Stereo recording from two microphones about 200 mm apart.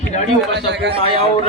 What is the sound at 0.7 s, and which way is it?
Speech, 60° right (ahead or behind).